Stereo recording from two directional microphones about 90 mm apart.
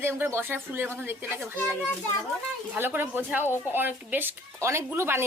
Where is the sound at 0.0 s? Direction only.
25° right (ahead or behind).